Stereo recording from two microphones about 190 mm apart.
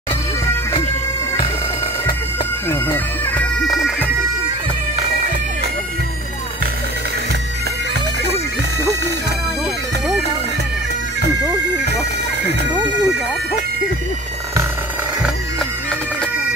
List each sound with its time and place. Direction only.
2.7 s bagpipes: 10° left (ahead or behind)
11.8 s bagpipes: 60° right (ahead or behind)
12.6 s bagpipes: 10° right (ahead or behind)